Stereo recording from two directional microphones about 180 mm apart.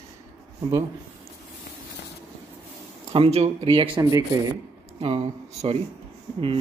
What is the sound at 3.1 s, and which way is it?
Speech, 35° right (ahead or behind).